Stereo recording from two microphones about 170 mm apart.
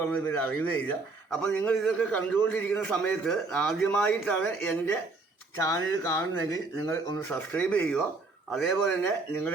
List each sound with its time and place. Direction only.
0.1 s a man's voice: 10° left (ahead or behind)